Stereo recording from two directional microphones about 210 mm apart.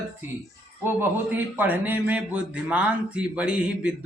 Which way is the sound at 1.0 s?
10° right (ahead or behind).